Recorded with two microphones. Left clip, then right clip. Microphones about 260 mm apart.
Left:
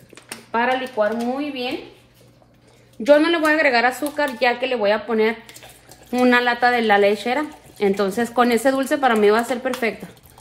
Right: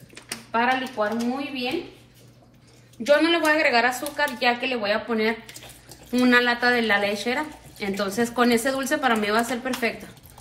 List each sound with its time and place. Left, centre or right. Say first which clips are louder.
0.5 s speech: left 2 dB; left
3.0 s speech: left 4 dB; left